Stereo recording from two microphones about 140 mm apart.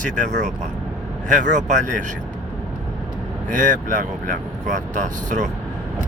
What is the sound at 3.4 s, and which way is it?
Speech, 65° right (ahead or behind).